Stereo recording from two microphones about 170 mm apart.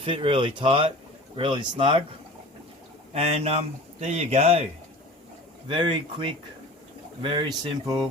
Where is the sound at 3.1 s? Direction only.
35° right (ahead or behind).